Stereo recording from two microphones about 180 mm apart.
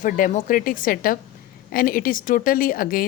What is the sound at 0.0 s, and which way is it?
Speech, 45° left (ahead or behind).